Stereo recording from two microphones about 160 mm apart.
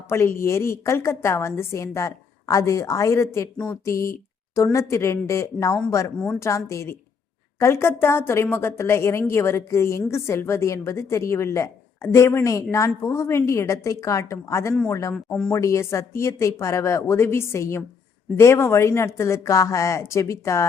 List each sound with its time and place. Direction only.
0.1 s a woman's voice: 15° left (ahead or behind)
15.1 s speech: 5° left (ahead or behind)
15.5 s a woman's voice: 20° left (ahead or behind)